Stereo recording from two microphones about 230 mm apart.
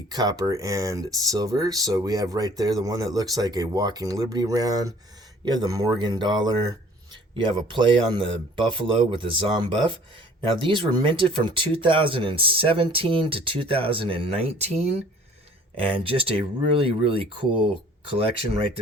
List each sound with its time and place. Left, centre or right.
0.1 s speech: centre
16.0 s speech: right